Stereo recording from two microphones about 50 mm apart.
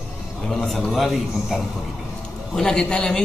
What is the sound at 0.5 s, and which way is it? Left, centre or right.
Speech, centre.